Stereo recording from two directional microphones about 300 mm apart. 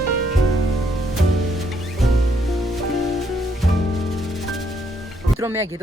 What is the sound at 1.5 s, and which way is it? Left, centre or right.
Music, centre.